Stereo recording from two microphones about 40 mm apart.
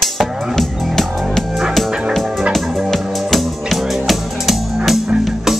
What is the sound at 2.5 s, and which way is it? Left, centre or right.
Music, centre.